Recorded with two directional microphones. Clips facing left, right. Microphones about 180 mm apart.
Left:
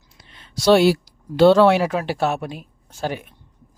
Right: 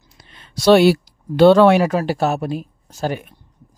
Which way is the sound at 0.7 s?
65° right (ahead or behind).